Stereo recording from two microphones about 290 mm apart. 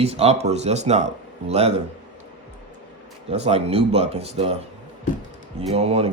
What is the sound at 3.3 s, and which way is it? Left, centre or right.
Speech, right.